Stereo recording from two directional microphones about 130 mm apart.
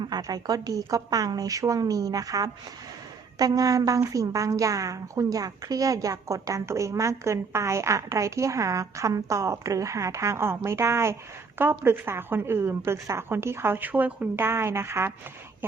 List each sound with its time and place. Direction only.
0.0 s a woman's voice: 30° right (ahead or behind)